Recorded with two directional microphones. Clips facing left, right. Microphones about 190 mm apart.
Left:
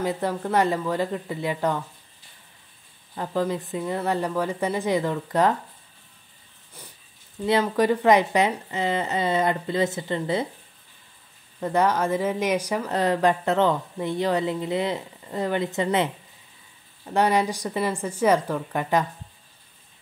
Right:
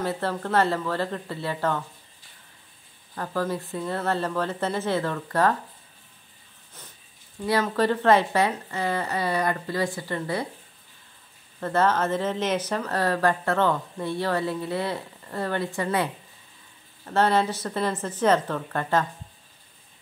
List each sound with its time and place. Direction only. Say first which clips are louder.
0.0 s a woman's voice: left 2 dB; 15° left (ahead or behind)
3.2 s a woman's voice: left 2 dB; 20° left (ahead or behind)
7.6 s a woman's voice: left 1 dB; 10° left (ahead or behind)
11.6 s a woman's voice: left 1 dB; 15° left (ahead or behind)